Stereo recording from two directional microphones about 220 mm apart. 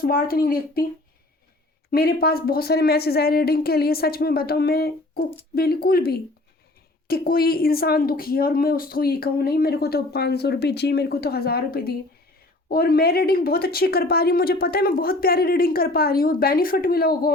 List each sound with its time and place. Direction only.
0.0 s a woman's voice: 45° left (ahead or behind)
1.9 s a woman's voice: 45° left (ahead or behind)